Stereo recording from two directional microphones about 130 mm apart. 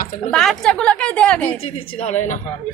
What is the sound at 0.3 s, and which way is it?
A woman's voice, 5° left (ahead or behind).